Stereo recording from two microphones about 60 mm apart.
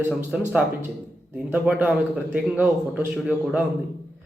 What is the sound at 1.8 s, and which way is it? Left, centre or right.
Speech, right.